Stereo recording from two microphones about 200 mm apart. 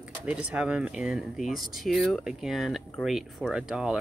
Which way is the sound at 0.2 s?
5° right (ahead or behind).